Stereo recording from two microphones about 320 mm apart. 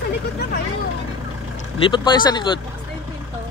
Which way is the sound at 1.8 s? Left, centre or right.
Centre.